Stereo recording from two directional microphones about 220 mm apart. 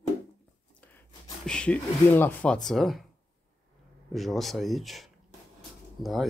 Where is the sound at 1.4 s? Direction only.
5° left (ahead or behind).